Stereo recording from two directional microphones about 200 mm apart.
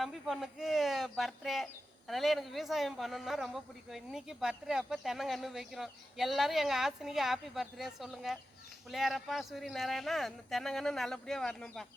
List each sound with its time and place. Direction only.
0.0 s a man's voice: centre (ahead or behind)